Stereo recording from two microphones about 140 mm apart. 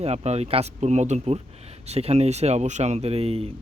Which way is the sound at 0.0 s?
50° right (ahead or behind).